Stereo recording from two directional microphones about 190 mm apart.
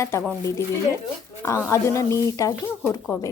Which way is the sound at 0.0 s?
15° left (ahead or behind).